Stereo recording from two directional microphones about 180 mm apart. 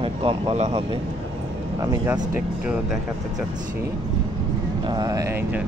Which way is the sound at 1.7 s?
20° right (ahead or behind).